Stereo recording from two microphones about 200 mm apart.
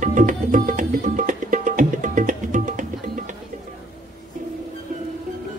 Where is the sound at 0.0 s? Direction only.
40° right (ahead or behind).